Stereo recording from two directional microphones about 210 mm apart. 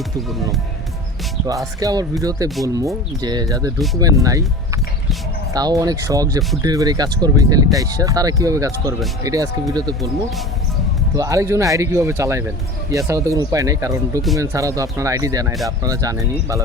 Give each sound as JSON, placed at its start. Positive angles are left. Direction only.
{"t": 0.2, "sound": "speech", "side_deg": 0}
{"t": 1.5, "sound": "speech", "side_deg": -15}
{"t": 11.1, "sound": "speech", "side_deg": -15}